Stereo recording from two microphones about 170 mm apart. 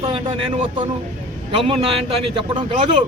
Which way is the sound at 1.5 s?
30° right (ahead or behind).